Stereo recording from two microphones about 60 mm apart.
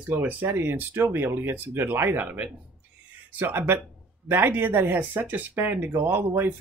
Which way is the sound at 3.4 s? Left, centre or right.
Right.